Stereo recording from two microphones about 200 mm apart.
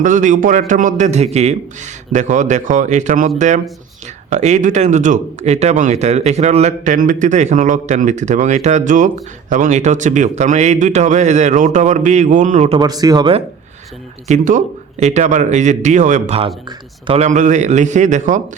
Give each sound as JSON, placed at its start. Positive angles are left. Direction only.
{"t": 0.0, "sound": "a man's voice", "side_deg": -40}
{"t": 14.3, "sound": "a man's voice", "side_deg": -40}
{"t": 17.2, "sound": "a man's voice", "side_deg": -40}